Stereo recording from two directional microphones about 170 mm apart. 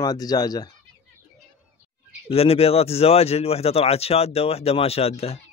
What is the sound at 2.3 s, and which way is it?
Speech, 35° left (ahead or behind).